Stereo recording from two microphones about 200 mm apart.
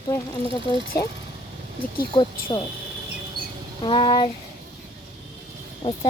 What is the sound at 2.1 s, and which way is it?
Speech, 25° left (ahead or behind).